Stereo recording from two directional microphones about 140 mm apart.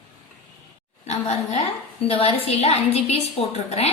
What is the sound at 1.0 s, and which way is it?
A woman's voice, 50° left (ahead or behind).